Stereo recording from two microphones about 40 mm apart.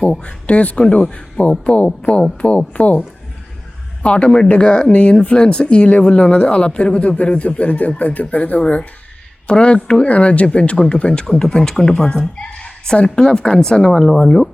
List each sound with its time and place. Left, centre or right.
0.1 s speech: left
10.1 s speech: left; by 12.0 s centre
12.5 s a sound: centre
13.0 s speech: left